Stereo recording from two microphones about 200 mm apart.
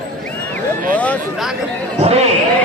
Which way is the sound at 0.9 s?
5° left (ahead or behind).